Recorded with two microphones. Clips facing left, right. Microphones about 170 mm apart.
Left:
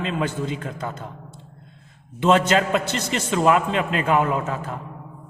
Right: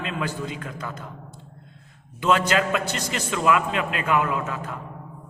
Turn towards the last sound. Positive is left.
turn(degrees=35)  # may be behind; listen again after turning